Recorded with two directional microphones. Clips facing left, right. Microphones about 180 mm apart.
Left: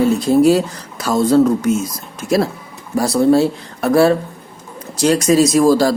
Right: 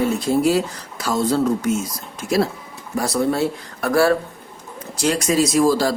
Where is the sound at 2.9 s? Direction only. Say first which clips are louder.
Left 7 dB; 35° left (ahead or behind).